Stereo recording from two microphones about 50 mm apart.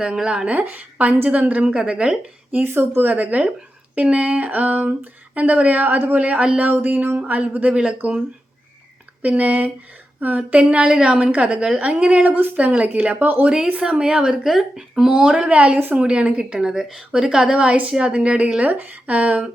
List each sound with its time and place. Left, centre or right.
0.0 s speech: centre
0.4 s speech: right
1.6 s a woman's voice: right
2.5 s a woman's voice: right
6.6 s speech: right
9.2 s speech: right
10.6 s a woman's voice: centre
12.4 s a woman's voice: right
13.1 s speech: right
13.4 s speech: centre
15.2 s a woman's voice: centre